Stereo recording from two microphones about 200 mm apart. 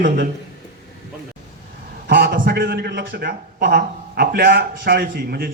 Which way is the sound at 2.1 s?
50° right (ahead or behind).